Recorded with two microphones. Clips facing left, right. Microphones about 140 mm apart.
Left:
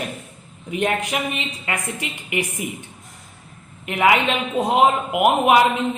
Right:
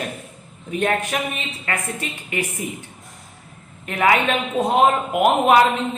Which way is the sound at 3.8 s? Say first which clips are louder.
Even; 20° left (ahead or behind).